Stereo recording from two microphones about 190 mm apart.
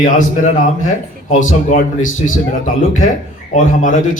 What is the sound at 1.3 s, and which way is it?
Speech, 45° left (ahead or behind).